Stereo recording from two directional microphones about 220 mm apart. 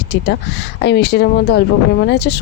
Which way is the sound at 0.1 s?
50° left (ahead or behind).